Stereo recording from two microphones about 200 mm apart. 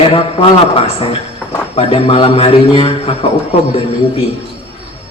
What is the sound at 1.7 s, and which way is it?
A man's voice, 30° left (ahead or behind).